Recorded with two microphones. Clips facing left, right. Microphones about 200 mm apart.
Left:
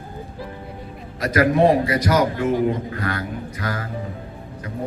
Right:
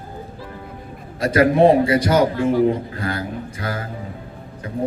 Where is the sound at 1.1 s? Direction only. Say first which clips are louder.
Right 3 dB; 30° right (ahead or behind).